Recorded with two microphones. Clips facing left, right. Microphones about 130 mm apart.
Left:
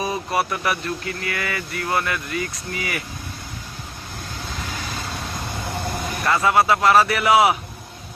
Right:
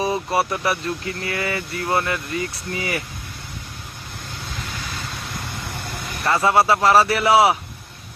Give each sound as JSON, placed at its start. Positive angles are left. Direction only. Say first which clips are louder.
{"t": 0.0, "sound": "speech", "louder": "right 2 dB", "side_deg": -25}
{"t": 6.2, "sound": "speech", "louder": "right 1 dB", "side_deg": -30}